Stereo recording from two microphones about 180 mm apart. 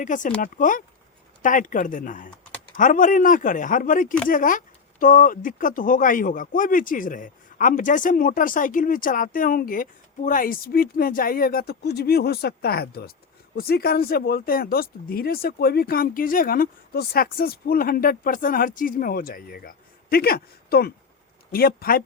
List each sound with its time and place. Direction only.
0.0 s speech: 45° left (ahead or behind)